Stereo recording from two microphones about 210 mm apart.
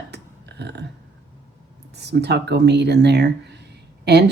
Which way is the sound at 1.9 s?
55° right (ahead or behind).